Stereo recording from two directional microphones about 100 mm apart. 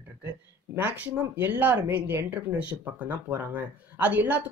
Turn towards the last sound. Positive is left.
turn(degrees=-15)  # may be behind; listen again after turning